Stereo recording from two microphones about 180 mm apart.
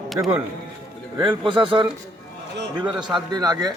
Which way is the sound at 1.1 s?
25° right (ahead or behind).